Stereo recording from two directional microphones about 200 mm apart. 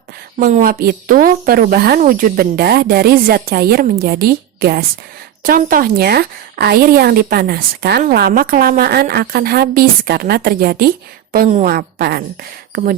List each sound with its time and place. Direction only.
0.3 s a woman's voice: 45° right (ahead or behind)